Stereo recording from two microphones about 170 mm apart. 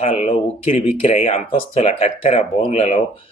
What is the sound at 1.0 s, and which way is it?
Speech, 40° left (ahead or behind).